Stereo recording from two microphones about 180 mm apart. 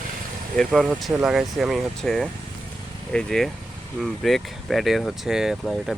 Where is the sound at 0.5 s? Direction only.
Centre (ahead or behind).